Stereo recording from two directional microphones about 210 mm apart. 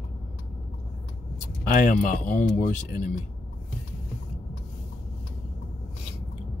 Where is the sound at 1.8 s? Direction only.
40° left (ahead or behind).